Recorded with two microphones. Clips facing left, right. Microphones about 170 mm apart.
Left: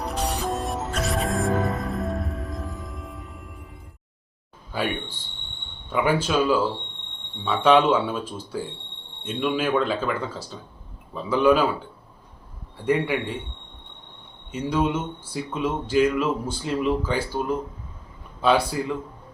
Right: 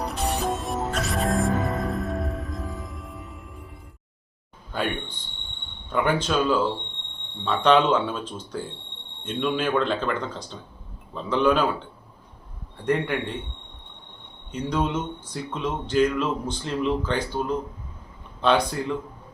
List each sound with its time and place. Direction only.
0.0 s music: centre (ahead or behind)
4.7 s a man's voice: 5° left (ahead or behind)
14.5 s speech: 5° left (ahead or behind)